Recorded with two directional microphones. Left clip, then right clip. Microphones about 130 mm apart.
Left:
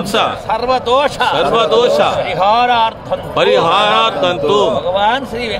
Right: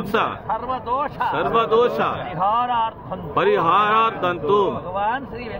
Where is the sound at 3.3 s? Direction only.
15° left (ahead or behind).